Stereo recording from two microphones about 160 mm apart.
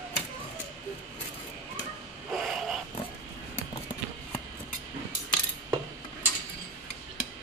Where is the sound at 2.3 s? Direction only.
Centre (ahead or behind).